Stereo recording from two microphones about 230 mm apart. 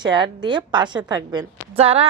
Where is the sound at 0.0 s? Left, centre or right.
Centre.